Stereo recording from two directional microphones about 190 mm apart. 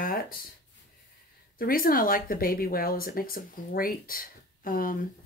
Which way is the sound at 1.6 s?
50° left (ahead or behind).